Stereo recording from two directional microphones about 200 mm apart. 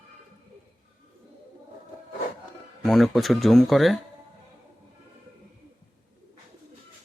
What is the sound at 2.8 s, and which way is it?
Speech, centre (ahead or behind).